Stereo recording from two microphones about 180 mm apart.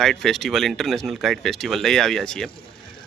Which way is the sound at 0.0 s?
Centre (ahead or behind).